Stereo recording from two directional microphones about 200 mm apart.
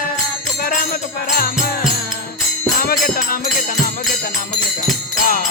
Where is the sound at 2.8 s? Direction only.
45° left (ahead or behind).